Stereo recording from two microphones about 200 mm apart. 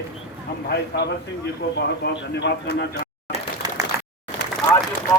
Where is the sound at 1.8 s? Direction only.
55° left (ahead or behind).